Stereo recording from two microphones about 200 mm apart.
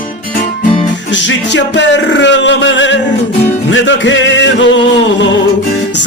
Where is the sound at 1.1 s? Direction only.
65° left (ahead or behind).